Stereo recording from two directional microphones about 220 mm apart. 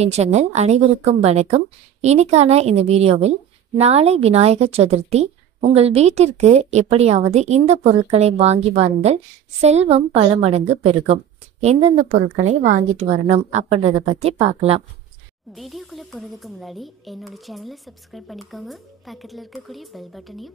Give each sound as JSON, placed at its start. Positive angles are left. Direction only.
{"t": 0.0, "sound": "a woman's voice", "side_deg": -30}
{"t": 15.5, "sound": "speech", "side_deg": 0}